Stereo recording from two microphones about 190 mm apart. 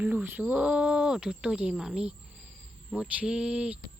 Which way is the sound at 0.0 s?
10° right (ahead or behind).